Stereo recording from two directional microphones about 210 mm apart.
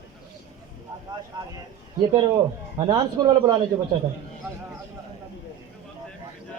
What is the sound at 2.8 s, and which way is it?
Speech, 25° right (ahead or behind).